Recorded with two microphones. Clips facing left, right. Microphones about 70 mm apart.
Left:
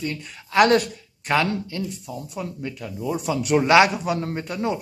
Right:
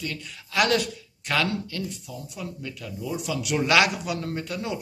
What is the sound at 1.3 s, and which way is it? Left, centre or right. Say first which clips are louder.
Speech: left 4 dB; left.